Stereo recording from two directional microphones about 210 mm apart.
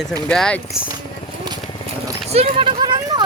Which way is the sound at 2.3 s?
30° right (ahead or behind).